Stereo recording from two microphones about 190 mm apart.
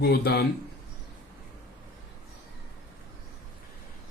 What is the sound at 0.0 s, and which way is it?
Speech, 55° left (ahead or behind).